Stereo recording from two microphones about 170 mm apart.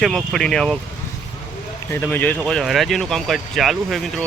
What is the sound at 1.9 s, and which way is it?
Speech, 10° left (ahead or behind).